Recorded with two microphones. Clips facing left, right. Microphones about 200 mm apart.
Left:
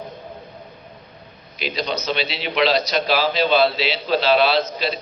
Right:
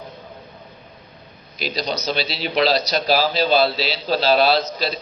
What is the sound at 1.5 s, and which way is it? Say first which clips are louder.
A man's voice: even; 40° right (ahead or behind).